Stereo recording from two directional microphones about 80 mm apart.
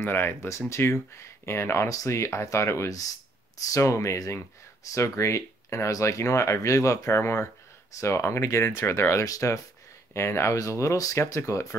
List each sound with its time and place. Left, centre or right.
0.0 s speech: left
9.2 s speech: left